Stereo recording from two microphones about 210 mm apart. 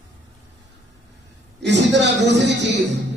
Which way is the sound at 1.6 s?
55° right (ahead or behind).